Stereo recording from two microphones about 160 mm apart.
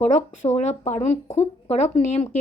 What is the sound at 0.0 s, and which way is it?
A woman's voice, 45° left (ahead or behind).